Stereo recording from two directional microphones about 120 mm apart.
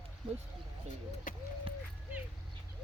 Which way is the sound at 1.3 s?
90° left.